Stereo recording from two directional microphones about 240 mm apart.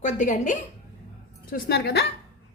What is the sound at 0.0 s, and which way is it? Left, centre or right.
A woman's voice, left.